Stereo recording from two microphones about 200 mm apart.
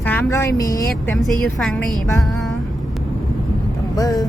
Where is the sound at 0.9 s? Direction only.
Centre (ahead or behind).